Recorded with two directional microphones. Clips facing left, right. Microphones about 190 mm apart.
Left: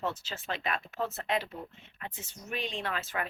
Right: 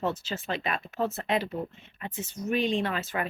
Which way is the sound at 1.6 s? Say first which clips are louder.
Right 9 dB; 25° right (ahead or behind).